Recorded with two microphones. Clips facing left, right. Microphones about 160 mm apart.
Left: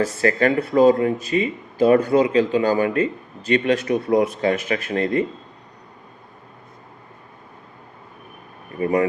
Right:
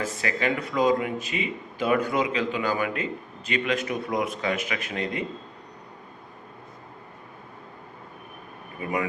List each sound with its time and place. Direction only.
0.0 s speech: 40° left (ahead or behind)
8.8 s speech: 35° left (ahead or behind)